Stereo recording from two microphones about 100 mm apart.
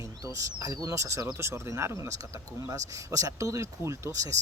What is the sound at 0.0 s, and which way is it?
Speech, 30° right (ahead or behind).